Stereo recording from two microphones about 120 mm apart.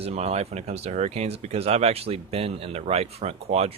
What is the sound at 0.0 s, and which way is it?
Speech, 60° right (ahead or behind).